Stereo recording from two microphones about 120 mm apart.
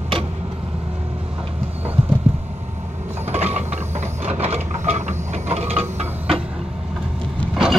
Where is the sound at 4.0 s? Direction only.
60° right (ahead or behind).